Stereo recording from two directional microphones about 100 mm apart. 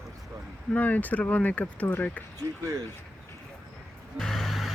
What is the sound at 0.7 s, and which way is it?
Speech, 15° left (ahead or behind).